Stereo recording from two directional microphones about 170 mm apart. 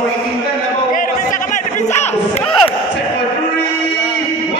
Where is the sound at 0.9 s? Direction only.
50° left (ahead or behind).